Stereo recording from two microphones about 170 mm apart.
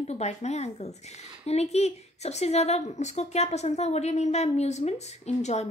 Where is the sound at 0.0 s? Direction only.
40° left (ahead or behind).